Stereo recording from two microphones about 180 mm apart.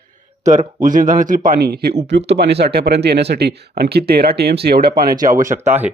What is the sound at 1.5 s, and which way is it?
Speech, 60° right (ahead or behind).